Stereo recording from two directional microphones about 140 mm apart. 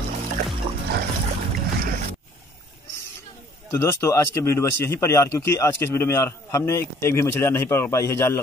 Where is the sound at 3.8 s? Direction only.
20° left (ahead or behind).